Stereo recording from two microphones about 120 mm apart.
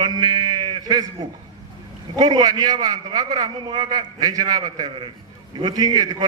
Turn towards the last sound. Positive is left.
turn(degrees=-35)  # may be behind; listen again after turning